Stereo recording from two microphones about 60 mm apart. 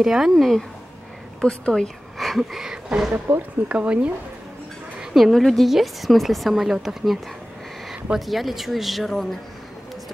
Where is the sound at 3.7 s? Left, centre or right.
Right.